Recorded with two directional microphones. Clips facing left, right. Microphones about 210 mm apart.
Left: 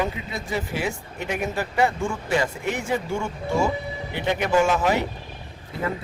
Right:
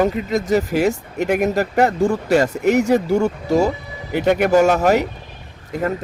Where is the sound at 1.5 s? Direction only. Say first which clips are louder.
Right 6 dB; 40° right (ahead or behind).